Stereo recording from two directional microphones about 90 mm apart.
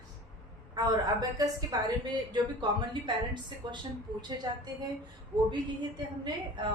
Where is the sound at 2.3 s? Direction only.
55° right (ahead or behind).